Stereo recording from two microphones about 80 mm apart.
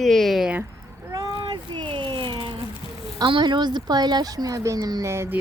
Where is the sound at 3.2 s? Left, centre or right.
Right.